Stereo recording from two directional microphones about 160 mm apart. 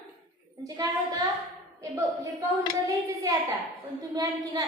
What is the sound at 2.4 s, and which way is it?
A woman's voice, 20° right (ahead or behind).